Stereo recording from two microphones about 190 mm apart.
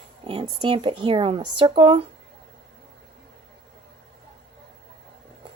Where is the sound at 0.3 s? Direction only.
30° right (ahead or behind).